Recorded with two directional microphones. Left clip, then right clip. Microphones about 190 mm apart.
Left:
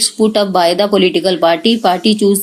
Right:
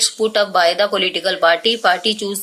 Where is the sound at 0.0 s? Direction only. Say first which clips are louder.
Left 3 dB; 10° left (ahead or behind).